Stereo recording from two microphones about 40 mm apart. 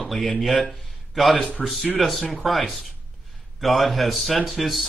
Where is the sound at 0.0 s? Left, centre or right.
Centre.